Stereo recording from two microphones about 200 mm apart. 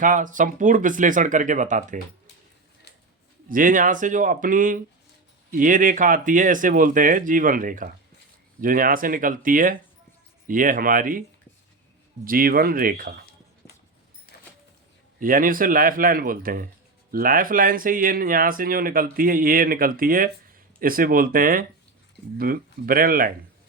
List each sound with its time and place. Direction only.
0.0 s speech: 40° right (ahead or behind)
3.5 s speech: 40° right (ahead or behind)
12.2 s speech: 45° right (ahead or behind)
15.2 s speech: 45° right (ahead or behind)